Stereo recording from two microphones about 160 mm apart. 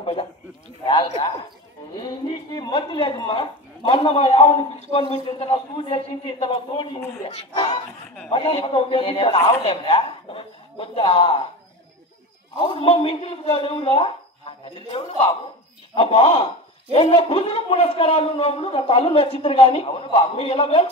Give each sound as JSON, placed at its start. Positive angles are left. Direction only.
{"t": 0.0, "sound": "a sound", "side_deg": 35}
{"t": 0.8, "sound": "speech", "side_deg": 30}
{"t": 12.5, "sound": "speech", "side_deg": 35}